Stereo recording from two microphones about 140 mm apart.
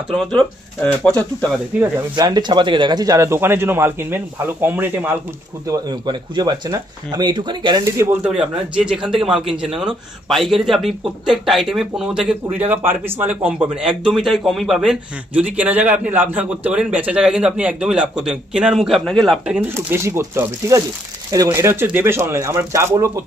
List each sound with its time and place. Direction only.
0.1 s speech: centre (ahead or behind)
1.8 s speech: 25° right (ahead or behind)
5.7 s speech: 30° right (ahead or behind)
8.7 s speech: 5° right (ahead or behind)
19.7 s speech: 20° right (ahead or behind)